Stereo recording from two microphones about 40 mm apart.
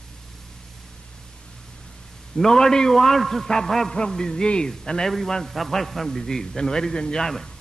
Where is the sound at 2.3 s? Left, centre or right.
Centre.